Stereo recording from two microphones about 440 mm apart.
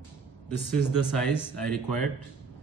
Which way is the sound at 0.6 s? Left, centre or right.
Right.